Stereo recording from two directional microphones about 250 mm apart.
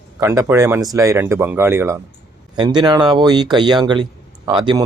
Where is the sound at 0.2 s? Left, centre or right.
Centre.